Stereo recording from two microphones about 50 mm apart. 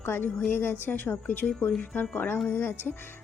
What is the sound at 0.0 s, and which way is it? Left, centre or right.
Speech, left.